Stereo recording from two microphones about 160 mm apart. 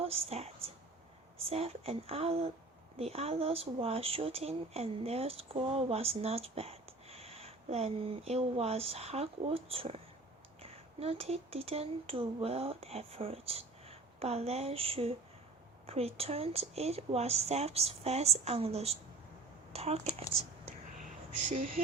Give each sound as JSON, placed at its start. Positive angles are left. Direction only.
{"t": 0.0, "sound": "a woman's voice", "side_deg": -40}